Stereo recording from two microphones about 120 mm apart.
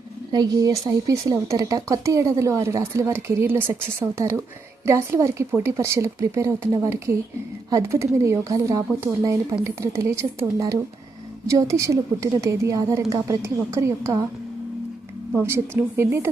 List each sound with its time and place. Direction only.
0.3 s speech: 35° right (ahead or behind)
15.4 s speech: 20° right (ahead or behind)